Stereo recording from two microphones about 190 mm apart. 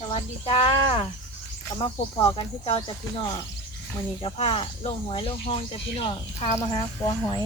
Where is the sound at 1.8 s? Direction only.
25° left (ahead or behind).